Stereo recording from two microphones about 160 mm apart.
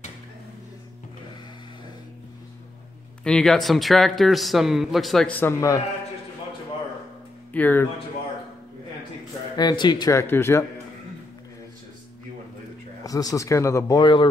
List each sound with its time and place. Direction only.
3.3 s speech: 5° left (ahead or behind)
7.5 s speech: 10° left (ahead or behind)
9.6 s speech: 25° left (ahead or behind)
13.0 s speech: 20° left (ahead or behind)